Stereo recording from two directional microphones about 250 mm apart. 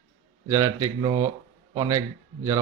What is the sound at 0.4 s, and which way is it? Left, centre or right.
Speech, centre.